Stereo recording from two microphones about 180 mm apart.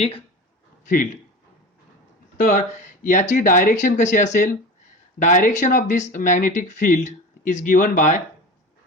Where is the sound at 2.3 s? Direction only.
50° left (ahead or behind).